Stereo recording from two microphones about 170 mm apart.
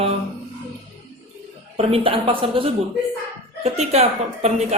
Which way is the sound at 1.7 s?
35° right (ahead or behind).